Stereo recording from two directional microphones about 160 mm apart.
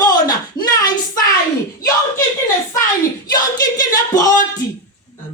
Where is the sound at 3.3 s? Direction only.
25° left (ahead or behind).